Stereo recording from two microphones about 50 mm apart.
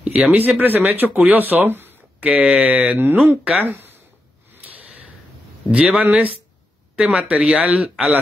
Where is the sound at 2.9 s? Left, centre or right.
Right.